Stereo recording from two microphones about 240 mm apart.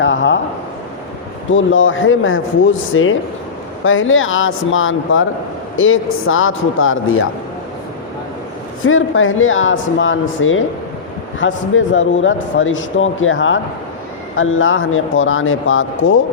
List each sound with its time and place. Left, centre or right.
0.0 s a man's voice: left
1.5 s speech: left
8.8 s speech: left